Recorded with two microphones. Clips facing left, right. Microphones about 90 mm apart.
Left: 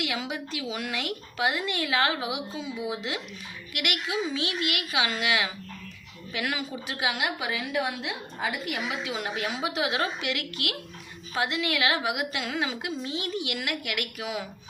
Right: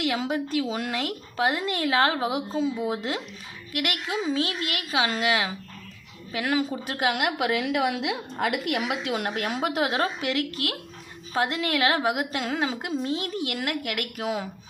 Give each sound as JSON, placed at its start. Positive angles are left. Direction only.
{"t": 0.0, "sound": "a woman's voice", "side_deg": -35}